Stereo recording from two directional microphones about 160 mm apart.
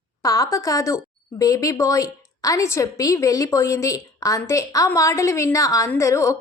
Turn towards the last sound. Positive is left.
turn(degrees=20)  # may be behind; listen again after turning